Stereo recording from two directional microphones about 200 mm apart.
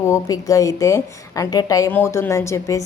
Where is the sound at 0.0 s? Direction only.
15° left (ahead or behind).